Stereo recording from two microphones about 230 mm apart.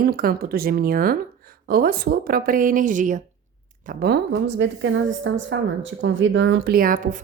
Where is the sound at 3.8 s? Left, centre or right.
Right.